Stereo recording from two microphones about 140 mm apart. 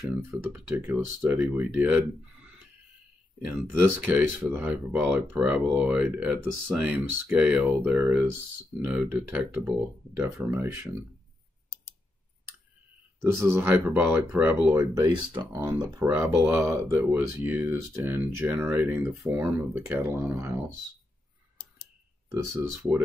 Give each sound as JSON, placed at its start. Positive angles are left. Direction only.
{"t": 0.5, "sound": "speech", "side_deg": -15}
{"t": 4.0, "sound": "speech", "side_deg": -15}
{"t": 13.4, "sound": "speech", "side_deg": -20}
{"t": 15.0, "sound": "speech", "side_deg": -35}
{"t": 16.0, "sound": "speech", "side_deg": -20}
{"t": 22.3, "sound": "speech", "side_deg": -20}